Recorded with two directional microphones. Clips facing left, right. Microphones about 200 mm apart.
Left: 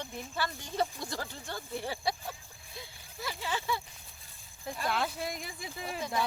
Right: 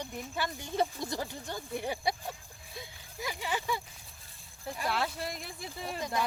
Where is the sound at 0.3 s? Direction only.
15° right (ahead or behind).